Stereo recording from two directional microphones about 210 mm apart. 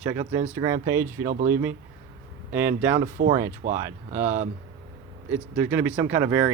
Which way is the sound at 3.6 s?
40° right (ahead or behind).